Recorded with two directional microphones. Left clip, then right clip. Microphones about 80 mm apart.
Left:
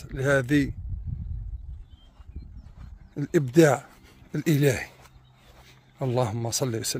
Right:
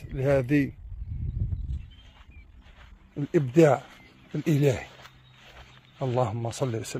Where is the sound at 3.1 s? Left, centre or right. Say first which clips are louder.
Left 1 dB; left.